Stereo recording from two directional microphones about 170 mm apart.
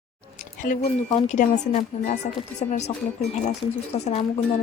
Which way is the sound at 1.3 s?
45° left (ahead or behind).